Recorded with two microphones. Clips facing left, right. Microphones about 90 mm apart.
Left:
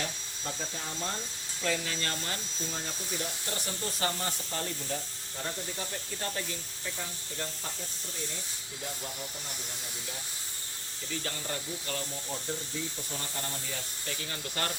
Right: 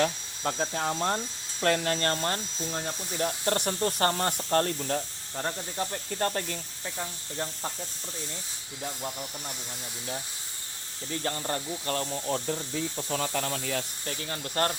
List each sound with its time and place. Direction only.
0.0 s speech: 60° right (ahead or behind)
5.7 s speech: 40° right (ahead or behind)
11.1 s speech: 40° right (ahead or behind)
12.3 s speech: 70° right (ahead or behind)
13.0 s speech: 90° right
14.1 s speech: 40° right (ahead or behind)